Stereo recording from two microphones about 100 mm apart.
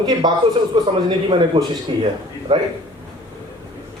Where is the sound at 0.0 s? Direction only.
45° right (ahead or behind).